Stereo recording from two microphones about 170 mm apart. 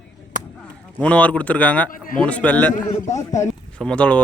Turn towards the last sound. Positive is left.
turn(degrees=5)  # may be behind; listen again after turning